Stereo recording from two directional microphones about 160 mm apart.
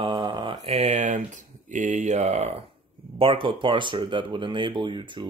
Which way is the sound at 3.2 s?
35° right (ahead or behind).